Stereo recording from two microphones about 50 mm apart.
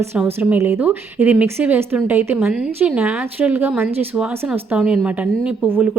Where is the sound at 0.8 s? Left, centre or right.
Right.